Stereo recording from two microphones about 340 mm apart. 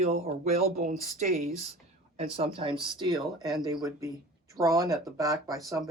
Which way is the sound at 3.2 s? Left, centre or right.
Centre.